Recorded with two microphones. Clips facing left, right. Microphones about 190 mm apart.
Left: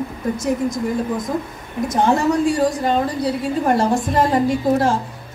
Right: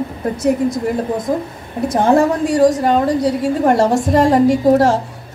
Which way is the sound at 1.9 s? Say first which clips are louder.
Right 5 dB; 55° right (ahead or behind).